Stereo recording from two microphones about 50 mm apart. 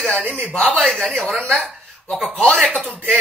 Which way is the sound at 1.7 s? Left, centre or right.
Centre.